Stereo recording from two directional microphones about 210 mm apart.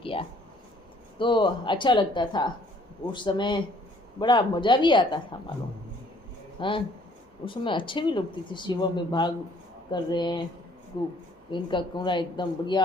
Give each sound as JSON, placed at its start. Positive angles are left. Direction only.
{"t": 0.0, "sound": "speech", "side_deg": 25}
{"t": 6.6, "sound": "speech", "side_deg": 25}
{"t": 11.5, "sound": "speech", "side_deg": 20}